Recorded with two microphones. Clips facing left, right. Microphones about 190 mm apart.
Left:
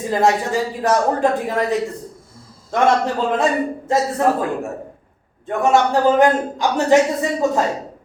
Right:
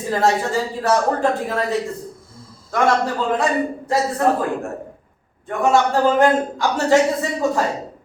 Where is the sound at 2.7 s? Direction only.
25° left (ahead or behind).